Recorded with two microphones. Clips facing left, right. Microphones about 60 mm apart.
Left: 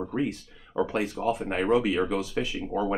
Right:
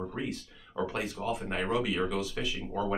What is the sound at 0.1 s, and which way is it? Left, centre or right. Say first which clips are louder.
Speech: left 7 dB; left.